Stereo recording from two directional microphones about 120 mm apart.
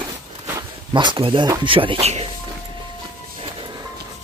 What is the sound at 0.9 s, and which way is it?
Speech, 45° right (ahead or behind).